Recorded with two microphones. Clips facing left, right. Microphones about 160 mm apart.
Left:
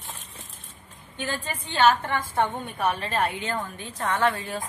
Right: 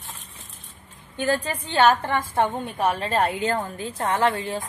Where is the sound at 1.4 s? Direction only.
35° right (ahead or behind).